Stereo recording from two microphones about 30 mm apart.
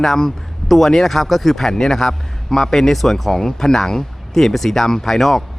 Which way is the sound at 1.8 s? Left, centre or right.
Left.